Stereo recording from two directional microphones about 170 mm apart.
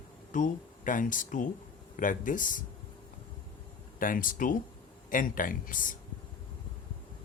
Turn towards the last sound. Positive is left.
turn(degrees=50)  # may be behind; listen again after turning